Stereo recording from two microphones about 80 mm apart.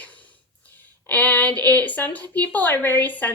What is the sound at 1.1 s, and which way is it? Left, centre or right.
Speech, left.